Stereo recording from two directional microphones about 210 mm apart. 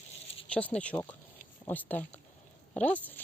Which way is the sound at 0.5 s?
5° left (ahead or behind).